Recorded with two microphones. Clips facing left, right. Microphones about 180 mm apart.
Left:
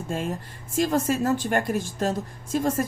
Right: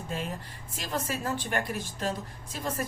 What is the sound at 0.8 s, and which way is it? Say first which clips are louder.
A woman's voice: left 11 dB; 45° left (ahead or behind).